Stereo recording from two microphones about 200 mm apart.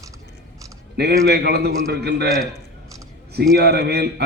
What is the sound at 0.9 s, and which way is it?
A man's voice, 50° right (ahead or behind).